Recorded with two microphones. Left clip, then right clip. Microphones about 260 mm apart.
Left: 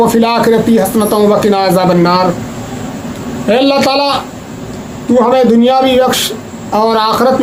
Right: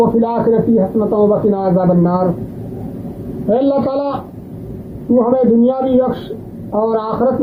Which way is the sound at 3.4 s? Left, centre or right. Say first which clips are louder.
Left 5 dB; centre.